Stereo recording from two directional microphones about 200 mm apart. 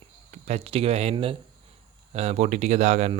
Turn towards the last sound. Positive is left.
turn(degrees=-35)  # may be behind; listen again after turning